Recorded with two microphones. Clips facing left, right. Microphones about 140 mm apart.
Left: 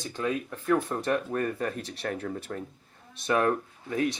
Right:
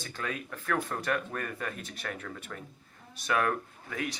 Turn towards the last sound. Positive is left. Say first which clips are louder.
# left 6 dB
turn(degrees=30)  # may be behind; listen again after turning